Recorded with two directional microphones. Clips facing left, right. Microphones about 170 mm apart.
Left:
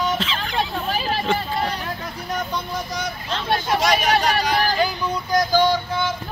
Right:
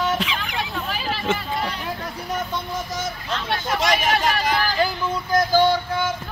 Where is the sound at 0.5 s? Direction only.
40° left (ahead or behind).